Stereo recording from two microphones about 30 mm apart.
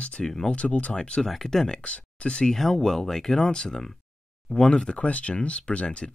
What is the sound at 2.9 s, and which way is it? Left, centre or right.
Speech, centre.